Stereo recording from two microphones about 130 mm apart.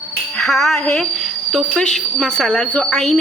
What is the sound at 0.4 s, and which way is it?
Speech, centre (ahead or behind).